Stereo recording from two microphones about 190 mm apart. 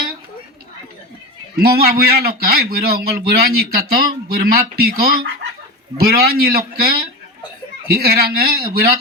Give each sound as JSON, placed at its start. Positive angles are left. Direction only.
{"t": 1.6, "sound": "a man's voice", "side_deg": -50}